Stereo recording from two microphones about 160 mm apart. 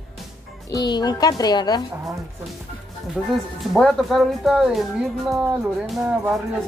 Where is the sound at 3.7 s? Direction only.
Centre (ahead or behind).